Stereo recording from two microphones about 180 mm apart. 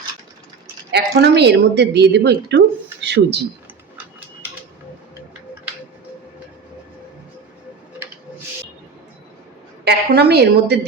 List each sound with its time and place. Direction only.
0.9 s a woman's voice: 70° right (ahead or behind)
9.8 s a woman's voice: 65° right (ahead or behind)